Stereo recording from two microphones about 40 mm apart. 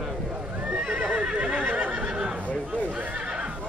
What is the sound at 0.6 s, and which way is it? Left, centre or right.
Neigh, right.